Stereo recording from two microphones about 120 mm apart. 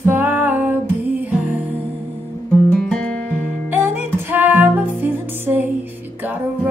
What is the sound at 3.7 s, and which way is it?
Music, 15° right (ahead or behind).